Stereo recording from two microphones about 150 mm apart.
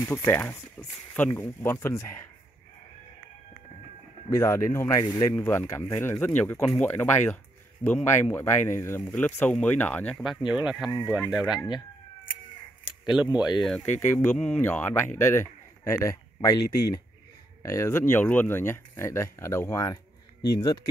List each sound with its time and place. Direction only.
0.0 s speech: 15° left (ahead or behind)
4.3 s a man's voice: 20° left (ahead or behind)
10.1 s speech: centre (ahead or behind)
13.1 s speech: 5° right (ahead or behind)
14.0 s a man's voice: 15° left (ahead or behind)